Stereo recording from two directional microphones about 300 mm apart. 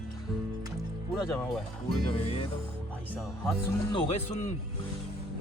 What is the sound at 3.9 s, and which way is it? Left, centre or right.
Speech, centre.